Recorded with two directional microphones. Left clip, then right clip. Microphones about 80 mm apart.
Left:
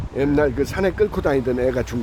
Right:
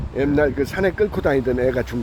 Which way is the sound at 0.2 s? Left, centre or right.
Left.